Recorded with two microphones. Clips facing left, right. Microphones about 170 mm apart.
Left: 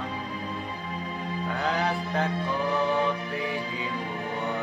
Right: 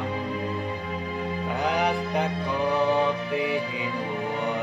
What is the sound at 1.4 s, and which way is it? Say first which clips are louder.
Music: right 2 dB; 15° right (ahead or behind).